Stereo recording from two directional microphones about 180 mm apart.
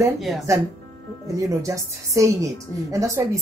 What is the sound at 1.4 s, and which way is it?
A woman's voice, 15° right (ahead or behind).